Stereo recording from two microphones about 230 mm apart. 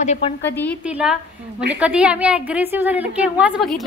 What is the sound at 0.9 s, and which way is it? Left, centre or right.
A woman's voice, centre.